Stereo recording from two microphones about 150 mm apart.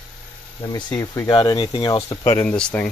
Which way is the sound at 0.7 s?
20° left (ahead or behind).